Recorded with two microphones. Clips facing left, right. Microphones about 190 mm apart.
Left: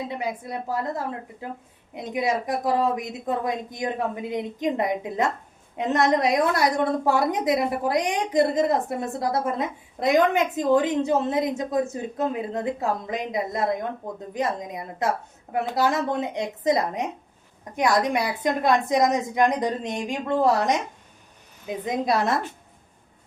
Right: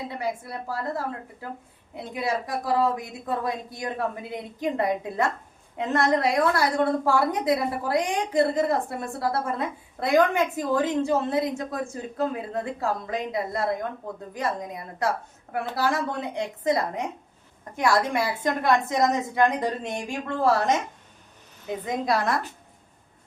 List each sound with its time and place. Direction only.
0.1 s a woman's voice: 20° left (ahead or behind)
21.8 s a woman's voice: 20° left (ahead or behind)